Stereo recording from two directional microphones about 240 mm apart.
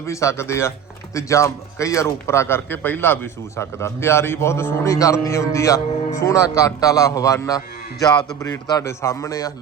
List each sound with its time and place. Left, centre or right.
0.0 s a man's voice: centre